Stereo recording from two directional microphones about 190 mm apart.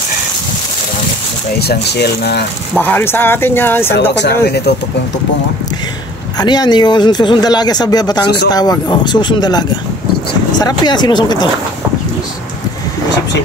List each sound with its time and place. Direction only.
1.6 s speech: 60° left (ahead or behind)
2.8 s speech: 10° left (ahead or behind)
4.1 s speech: 65° left (ahead or behind)
6.3 s speech: 20° left (ahead or behind)